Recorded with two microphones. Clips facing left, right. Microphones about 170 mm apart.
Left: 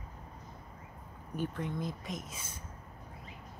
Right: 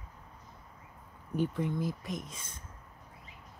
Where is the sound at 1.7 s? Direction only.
Centre (ahead or behind).